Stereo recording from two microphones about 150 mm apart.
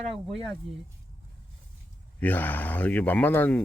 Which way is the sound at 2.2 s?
10° left (ahead or behind).